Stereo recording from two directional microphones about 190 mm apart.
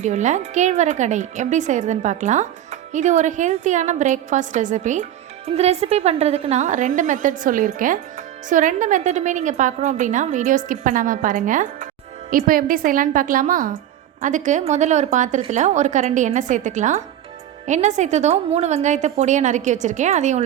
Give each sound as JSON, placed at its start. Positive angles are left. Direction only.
{"t": 0.0, "sound": "a woman's voice", "side_deg": -40}